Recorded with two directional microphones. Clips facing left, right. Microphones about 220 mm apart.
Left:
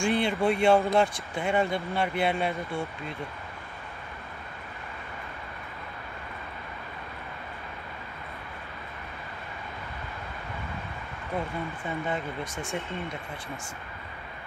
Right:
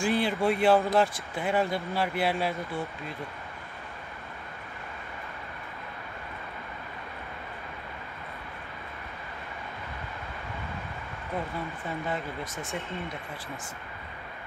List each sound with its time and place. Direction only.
0.0 s speech: centre (ahead or behind)
11.5 s speech: centre (ahead or behind)